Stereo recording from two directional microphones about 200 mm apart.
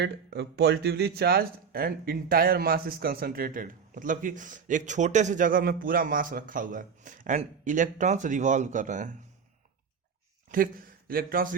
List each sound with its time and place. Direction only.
0.0 s speech: 55° right (ahead or behind); by 9.1 s 40° right (ahead or behind)
10.5 s a man's voice: 45° right (ahead or behind)